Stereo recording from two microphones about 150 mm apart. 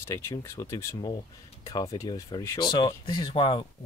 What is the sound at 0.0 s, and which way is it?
Speech, 20° left (ahead or behind).